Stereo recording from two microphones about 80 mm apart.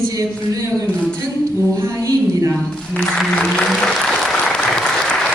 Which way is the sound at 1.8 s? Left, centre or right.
Right.